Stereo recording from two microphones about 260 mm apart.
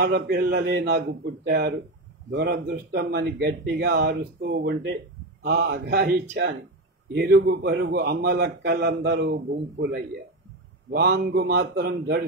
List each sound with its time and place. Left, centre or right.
0.0 s a man's voice: right